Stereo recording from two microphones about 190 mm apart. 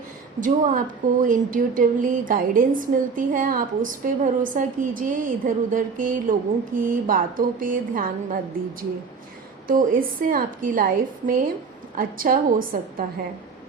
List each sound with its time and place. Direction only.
0.3 s a woman's voice: 45° right (ahead or behind)
9.6 s a woman's voice: 45° right (ahead or behind)